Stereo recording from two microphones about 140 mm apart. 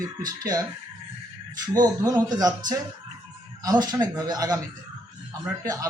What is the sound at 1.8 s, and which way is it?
Speech, 30° right (ahead or behind).